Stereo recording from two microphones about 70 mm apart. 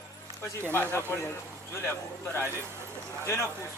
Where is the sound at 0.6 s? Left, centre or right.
Left.